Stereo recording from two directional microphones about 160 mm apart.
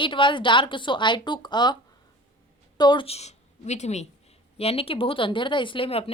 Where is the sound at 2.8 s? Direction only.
30° left (ahead or behind).